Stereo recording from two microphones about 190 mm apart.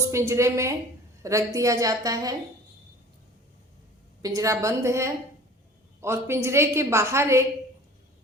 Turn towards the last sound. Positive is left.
turn(degrees=-15)  # may be behind; listen again after turning